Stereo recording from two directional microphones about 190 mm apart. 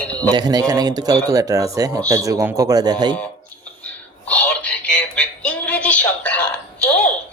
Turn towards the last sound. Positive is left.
turn(degrees=5)  # may be behind; listen again after turning